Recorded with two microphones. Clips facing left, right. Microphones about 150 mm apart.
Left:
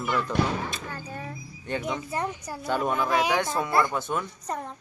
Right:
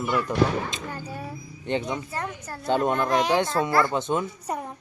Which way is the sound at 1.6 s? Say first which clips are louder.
Right 3 dB; 20° right (ahead or behind).